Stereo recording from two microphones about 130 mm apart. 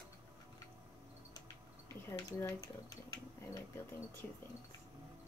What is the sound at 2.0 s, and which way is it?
Speech, 20° left (ahead or behind).